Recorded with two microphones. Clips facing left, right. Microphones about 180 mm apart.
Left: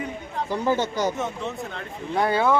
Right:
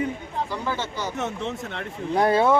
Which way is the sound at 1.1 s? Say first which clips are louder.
Even; 75° right (ahead or behind).